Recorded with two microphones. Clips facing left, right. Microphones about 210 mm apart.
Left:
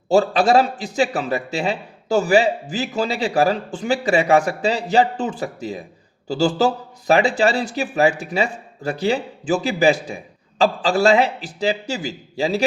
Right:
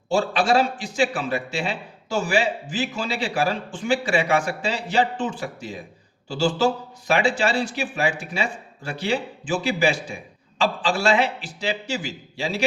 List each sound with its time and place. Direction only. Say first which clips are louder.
0.1 s a man's voice: left 5 dB; 40° left (ahead or behind)